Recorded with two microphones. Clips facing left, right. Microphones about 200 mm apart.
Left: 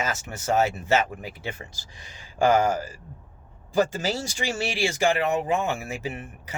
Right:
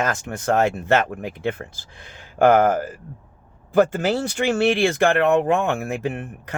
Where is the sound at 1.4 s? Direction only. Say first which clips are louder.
Right 9 dB; 55° right (ahead or behind).